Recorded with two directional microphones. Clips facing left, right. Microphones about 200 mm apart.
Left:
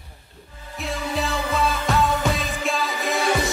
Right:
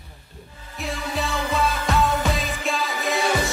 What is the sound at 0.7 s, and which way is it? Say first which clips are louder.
Music: left 1 dB; centre (ahead or behind).